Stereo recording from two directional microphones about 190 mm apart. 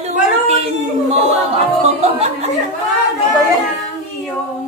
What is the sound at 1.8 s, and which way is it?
Speech, 35° right (ahead or behind).